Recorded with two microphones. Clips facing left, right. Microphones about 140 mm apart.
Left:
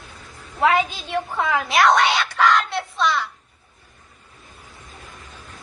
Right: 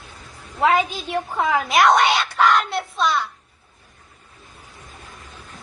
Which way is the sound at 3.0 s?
25° right (ahead or behind).